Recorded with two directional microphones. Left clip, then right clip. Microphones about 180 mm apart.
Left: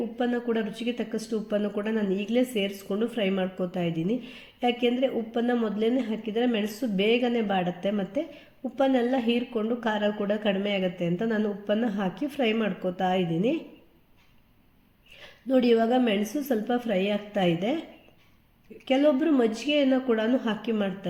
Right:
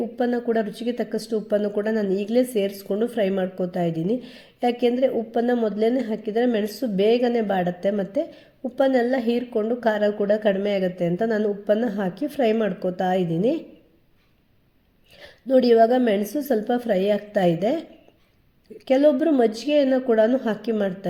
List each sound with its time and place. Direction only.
0.2 s a woman's voice: 30° right (ahead or behind)
15.1 s a woman's voice: 30° right (ahead or behind)
18.9 s a woman's voice: 30° right (ahead or behind)